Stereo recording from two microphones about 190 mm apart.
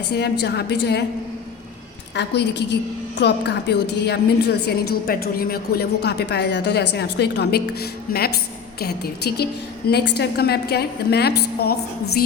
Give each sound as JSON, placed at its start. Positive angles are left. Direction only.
{"t": 0.2, "sound": "a woman's voice", "side_deg": 60}
{"t": 2.1, "sound": "a woman's voice", "side_deg": 65}